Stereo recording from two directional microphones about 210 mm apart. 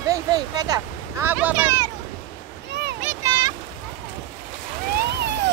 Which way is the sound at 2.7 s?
50° right (ahead or behind).